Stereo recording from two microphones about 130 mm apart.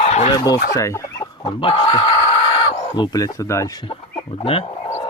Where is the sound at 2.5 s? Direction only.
50° left (ahead or behind).